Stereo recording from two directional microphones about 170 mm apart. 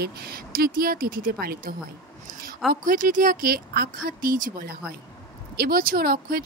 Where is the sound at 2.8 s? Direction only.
50° right (ahead or behind).